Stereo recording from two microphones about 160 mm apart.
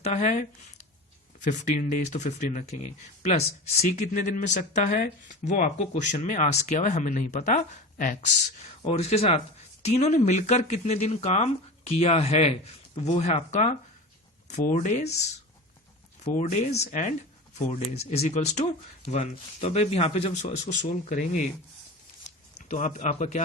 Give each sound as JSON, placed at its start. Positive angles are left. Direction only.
{"t": 0.0, "sound": "speech", "side_deg": 45}
{"t": 1.5, "sound": "speech", "side_deg": 50}
{"t": 8.8, "sound": "speech", "side_deg": 40}
{"t": 16.2, "sound": "speech", "side_deg": 50}
{"t": 22.7, "sound": "speech", "side_deg": 50}